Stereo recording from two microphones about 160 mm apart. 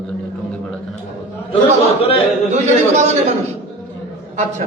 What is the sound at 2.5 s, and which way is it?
Speech, 45° right (ahead or behind).